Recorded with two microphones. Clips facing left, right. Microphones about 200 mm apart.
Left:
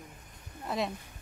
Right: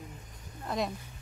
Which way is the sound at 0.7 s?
5° left (ahead or behind).